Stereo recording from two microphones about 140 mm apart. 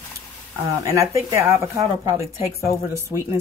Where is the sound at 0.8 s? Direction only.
20° right (ahead or behind).